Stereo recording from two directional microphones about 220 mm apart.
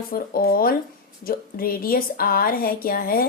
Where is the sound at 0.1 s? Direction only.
40° left (ahead or behind).